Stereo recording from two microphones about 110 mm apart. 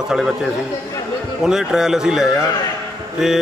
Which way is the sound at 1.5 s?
5° right (ahead or behind).